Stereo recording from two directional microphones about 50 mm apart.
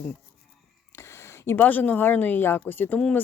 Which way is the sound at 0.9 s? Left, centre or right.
Left.